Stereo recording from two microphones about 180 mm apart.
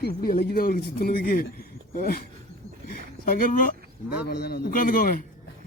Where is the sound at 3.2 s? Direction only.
50° left (ahead or behind).